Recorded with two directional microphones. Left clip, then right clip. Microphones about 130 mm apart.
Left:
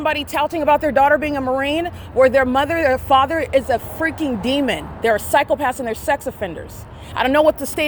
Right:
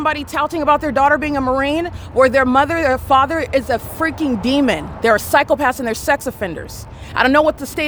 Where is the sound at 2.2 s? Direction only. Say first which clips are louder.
Right 2 dB; 35° right (ahead or behind).